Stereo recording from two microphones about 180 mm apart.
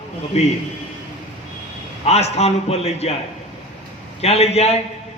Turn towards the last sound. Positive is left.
turn(degrees=35)  # may be behind; listen again after turning